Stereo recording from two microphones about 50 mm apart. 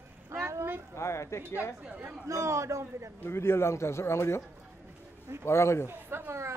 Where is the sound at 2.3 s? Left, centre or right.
Right.